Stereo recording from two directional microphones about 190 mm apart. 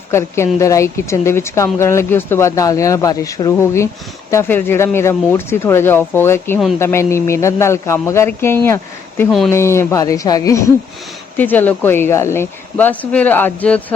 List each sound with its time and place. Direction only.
0.1 s a woman's voice: 15° left (ahead or behind)